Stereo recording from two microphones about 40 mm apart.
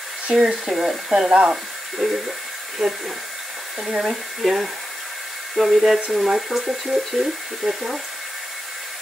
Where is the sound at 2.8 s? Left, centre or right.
Centre.